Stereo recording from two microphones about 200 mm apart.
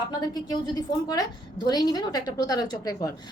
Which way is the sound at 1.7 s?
20° left (ahead or behind).